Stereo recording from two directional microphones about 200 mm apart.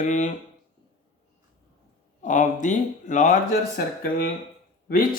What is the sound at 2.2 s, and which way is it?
Speech, 40° left (ahead or behind).